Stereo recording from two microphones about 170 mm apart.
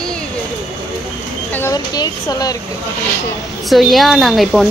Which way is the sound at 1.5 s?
15° left (ahead or behind).